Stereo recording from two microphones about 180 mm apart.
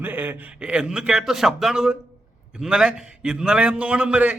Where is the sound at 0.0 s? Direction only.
10° right (ahead or behind).